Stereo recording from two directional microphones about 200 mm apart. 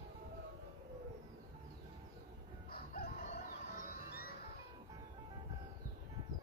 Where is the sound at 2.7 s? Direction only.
50° left (ahead or behind).